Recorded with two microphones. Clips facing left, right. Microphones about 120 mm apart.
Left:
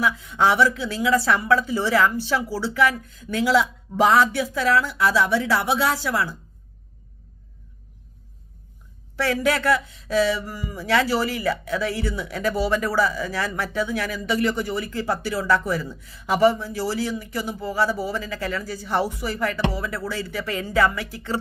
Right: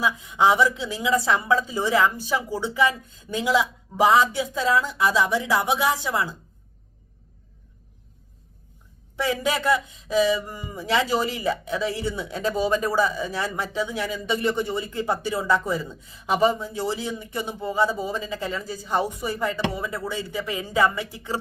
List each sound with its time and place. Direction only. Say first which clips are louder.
0.0 s a woman's voice: even; 15° right (ahead or behind)
9.1 s speech: left 2 dB; 20° right (ahead or behind)